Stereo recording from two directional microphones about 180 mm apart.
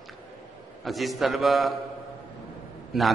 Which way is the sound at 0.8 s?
Centre (ahead or behind).